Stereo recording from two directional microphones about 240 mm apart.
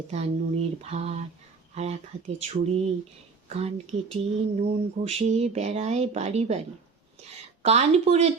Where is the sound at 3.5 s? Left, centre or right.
Right.